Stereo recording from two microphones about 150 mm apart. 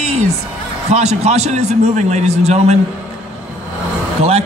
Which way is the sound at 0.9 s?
45° right (ahead or behind).